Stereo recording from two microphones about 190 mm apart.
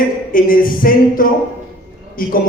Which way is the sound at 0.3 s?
45° left (ahead or behind).